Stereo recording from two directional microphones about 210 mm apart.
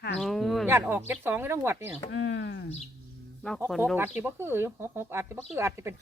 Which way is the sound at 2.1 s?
55° left (ahead or behind).